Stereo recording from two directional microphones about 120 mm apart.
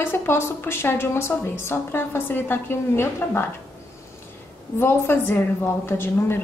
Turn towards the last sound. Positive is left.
turn(degrees=20)  # may be behind; listen again after turning